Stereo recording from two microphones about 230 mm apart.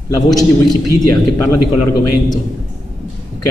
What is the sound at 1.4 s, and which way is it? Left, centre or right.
Speech, left.